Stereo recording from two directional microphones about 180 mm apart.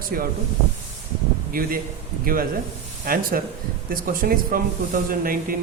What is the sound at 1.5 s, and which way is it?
A man's voice, 55° right (ahead or behind).